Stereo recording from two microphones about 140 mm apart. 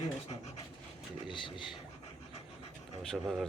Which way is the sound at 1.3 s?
35° left (ahead or behind).